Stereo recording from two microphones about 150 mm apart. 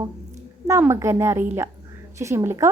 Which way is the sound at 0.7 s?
20° right (ahead or behind).